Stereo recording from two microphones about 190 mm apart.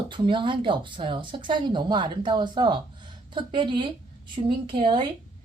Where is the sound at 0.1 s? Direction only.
25° right (ahead or behind).